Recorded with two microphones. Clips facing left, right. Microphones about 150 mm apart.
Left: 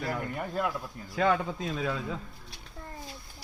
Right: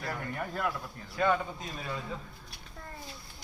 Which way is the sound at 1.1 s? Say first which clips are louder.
Left 2 dB; 90° left.